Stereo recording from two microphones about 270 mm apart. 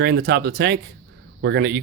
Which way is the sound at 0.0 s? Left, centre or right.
Right.